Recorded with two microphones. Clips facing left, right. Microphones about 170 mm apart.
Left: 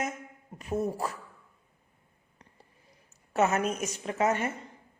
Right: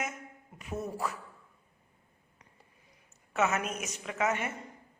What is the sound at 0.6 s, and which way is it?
Speech, 35° left (ahead or behind).